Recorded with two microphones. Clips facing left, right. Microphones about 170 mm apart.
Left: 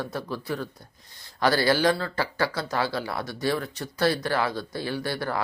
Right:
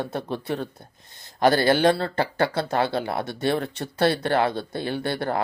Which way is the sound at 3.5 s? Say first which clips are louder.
Right 3 dB; 25° right (ahead or behind).